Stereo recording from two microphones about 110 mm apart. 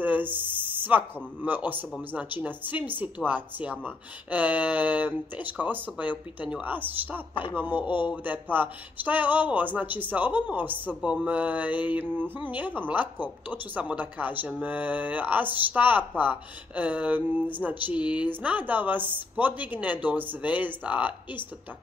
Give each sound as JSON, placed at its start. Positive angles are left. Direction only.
{"t": 0.0, "sound": "speech", "side_deg": -15}